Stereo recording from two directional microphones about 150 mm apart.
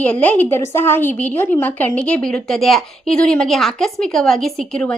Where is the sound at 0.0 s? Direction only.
10° left (ahead or behind).